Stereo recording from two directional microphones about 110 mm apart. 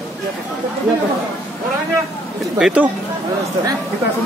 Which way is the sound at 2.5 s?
10° right (ahead or behind).